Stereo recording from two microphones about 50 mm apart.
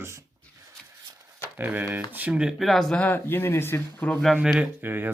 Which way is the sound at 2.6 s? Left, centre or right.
Centre.